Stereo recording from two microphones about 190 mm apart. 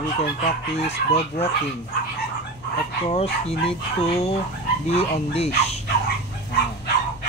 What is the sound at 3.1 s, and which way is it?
Speech, 30° left (ahead or behind).